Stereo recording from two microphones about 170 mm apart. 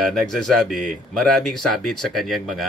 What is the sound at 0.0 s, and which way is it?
Speech, centre (ahead or behind).